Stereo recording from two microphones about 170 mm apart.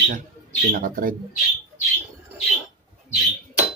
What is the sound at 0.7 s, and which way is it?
Speech, 55° right (ahead or behind).